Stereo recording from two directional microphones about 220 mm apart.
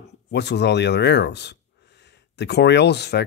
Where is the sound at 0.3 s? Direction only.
50° left (ahead or behind).